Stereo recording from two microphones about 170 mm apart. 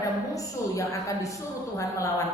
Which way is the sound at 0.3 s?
20° left (ahead or behind).